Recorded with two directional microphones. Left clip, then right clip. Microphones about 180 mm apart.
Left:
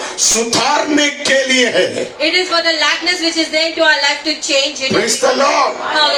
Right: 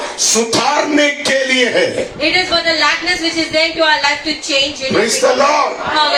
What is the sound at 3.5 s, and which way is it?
Speech, 30° left (ahead or behind).